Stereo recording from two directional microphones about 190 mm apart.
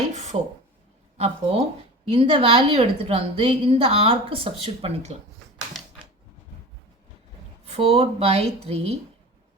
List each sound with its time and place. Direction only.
0.1 s a sound: 35° right (ahead or behind)
1.2 s a woman's voice: 30° right (ahead or behind)
7.6 s speech: 30° right (ahead or behind)